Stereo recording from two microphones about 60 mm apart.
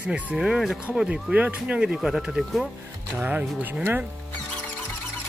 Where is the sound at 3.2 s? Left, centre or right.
Right.